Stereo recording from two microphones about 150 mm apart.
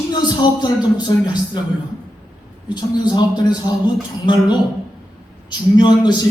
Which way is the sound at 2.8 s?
30° left (ahead or behind).